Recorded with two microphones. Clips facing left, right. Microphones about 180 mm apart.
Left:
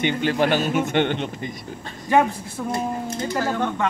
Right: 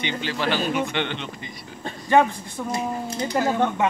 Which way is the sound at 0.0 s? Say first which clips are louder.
Left 6 dB; 50° left (ahead or behind).